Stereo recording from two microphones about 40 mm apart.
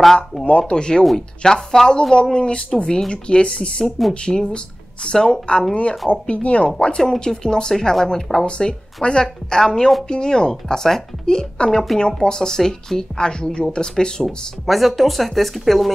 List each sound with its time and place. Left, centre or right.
0.0 s speech: centre
0.5 s a woman's voice: left
5.8 s speech: left
7.2 s a woman's voice: centre
8.5 s a woman's voice: left
14.2 s speech: centre